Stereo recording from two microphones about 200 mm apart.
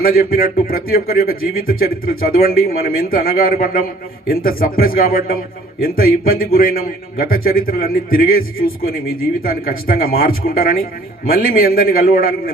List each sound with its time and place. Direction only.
0.0 s a man's voice: 45° left (ahead or behind)